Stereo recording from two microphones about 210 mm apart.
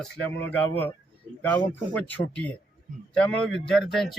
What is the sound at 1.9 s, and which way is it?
A man's voice, 5° left (ahead or behind).